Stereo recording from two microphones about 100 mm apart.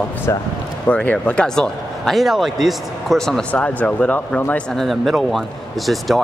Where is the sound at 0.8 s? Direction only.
15° left (ahead or behind).